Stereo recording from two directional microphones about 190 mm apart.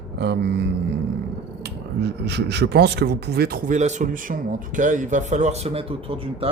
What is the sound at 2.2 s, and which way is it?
Speech, 60° right (ahead or behind).